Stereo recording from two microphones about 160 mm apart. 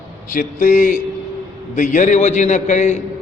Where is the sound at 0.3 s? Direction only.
55° left (ahead or behind).